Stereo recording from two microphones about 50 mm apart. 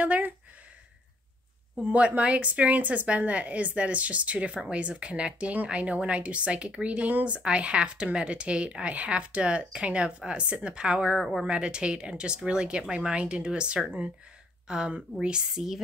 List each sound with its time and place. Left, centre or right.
1.8 s a woman's voice: right
11.1 s a woman's voice: centre
11.5 s a woman's voice: right